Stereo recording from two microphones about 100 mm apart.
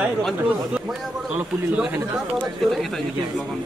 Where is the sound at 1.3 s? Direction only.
15° right (ahead or behind).